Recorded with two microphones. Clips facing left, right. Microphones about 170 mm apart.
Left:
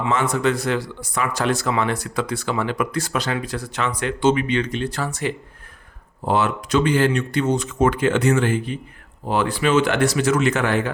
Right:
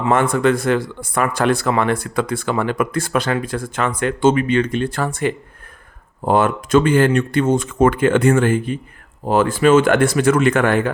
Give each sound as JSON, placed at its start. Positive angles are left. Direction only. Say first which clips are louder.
{"t": 0.0, "sound": "speech", "louder": "right 4 dB", "side_deg": -55}